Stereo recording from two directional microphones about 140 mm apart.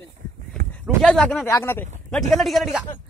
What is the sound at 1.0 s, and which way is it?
Speech, 5° left (ahead or behind).